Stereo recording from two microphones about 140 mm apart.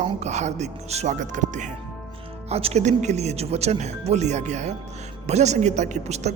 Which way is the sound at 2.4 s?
50° right (ahead or behind).